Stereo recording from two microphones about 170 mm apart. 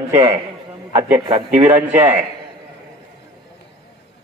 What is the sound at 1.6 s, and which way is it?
Speech, 10° right (ahead or behind).